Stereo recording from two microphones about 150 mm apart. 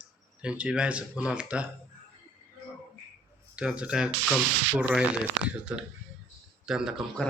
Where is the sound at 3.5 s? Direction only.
5° right (ahead or behind).